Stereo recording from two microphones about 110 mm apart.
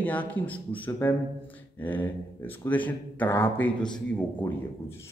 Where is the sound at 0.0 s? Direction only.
15° left (ahead or behind).